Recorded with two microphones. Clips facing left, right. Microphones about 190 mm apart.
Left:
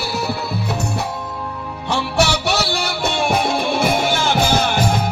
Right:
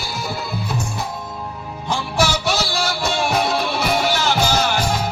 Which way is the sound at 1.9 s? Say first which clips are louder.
Left 2 dB; 70° left (ahead or behind).